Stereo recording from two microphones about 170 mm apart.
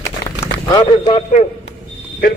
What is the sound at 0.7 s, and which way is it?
Speech, 25° left (ahead or behind).